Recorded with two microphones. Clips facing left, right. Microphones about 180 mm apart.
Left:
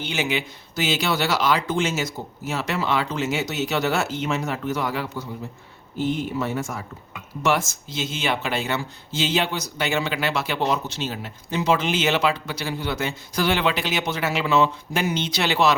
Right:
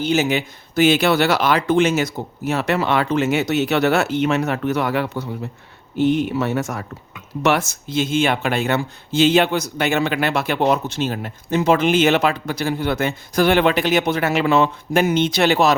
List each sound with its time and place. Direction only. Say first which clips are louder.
0.0 s speech: right 7 dB; 40° right (ahead or behind)